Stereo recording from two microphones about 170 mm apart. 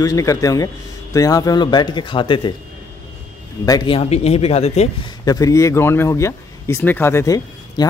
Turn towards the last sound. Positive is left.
turn(degrees=20)  # may be behind; listen again after turning